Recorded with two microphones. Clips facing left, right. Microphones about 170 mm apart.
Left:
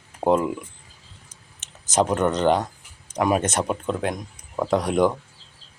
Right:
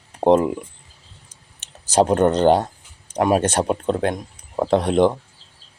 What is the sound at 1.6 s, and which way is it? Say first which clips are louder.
Speech: right 4 dB; 35° right (ahead or behind).